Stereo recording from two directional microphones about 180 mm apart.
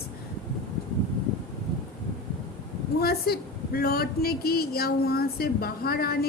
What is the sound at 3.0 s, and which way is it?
A woman's voice, 60° left (ahead or behind).